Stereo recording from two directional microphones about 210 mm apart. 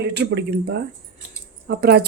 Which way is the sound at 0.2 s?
50° right (ahead or behind).